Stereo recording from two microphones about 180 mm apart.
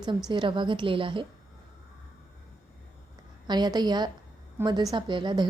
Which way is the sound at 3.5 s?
25° right (ahead or behind).